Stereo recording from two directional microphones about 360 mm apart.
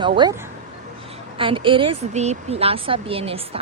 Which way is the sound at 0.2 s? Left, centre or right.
Centre.